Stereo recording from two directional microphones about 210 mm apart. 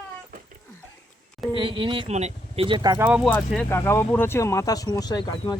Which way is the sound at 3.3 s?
10° left (ahead or behind).